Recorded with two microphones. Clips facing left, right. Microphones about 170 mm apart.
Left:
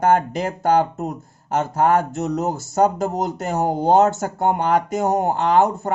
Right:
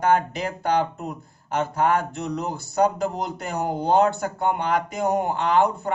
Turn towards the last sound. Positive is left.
turn(degrees=45)  # may be behind; listen again after turning